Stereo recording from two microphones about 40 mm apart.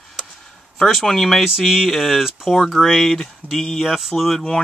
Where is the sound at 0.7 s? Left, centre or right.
Centre.